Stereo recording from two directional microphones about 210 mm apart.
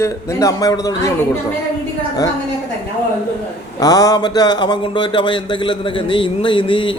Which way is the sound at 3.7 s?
15° left (ahead or behind).